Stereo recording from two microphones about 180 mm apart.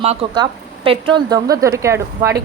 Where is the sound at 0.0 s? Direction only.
35° right (ahead or behind).